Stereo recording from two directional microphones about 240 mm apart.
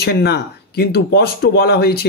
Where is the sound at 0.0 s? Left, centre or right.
Left.